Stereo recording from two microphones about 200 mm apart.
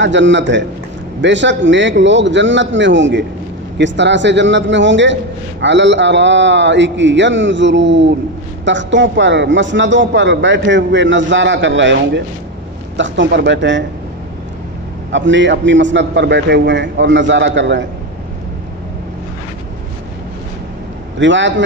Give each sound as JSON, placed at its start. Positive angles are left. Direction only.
{"t": 0.0, "sound": "a man's voice", "side_deg": -65}
{"t": 15.0, "sound": "a man's voice", "side_deg": -65}
{"t": 21.2, "sound": "a man's voice", "side_deg": -65}